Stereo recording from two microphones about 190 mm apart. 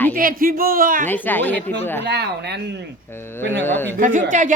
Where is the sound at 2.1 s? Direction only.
60° right (ahead or behind).